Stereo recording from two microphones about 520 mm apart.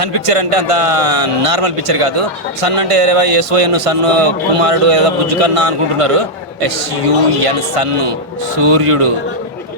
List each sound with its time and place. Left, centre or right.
0.0 s a man's voice: right